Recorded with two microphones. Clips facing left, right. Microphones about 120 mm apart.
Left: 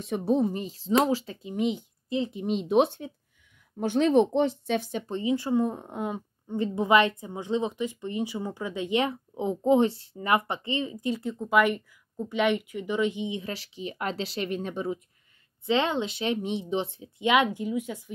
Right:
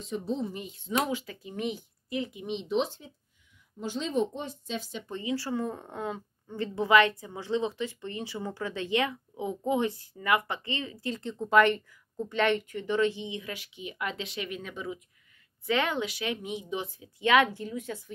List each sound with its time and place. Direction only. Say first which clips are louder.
0.0 s speech: left 7 dB; 65° left (ahead or behind)
0.6 s speech: left 6 dB; 35° left (ahead or behind)
2.4 s speech: left 7 dB; 45° left (ahead or behind)
2.8 s speech: left 8 dB; 65° left (ahead or behind)
5.0 s speech: left 5 dB; 25° left (ahead or behind)
13.4 s speech: left 4 dB; 35° left (ahead or behind)
15.6 s speech: left 3 dB; 25° left (ahead or behind)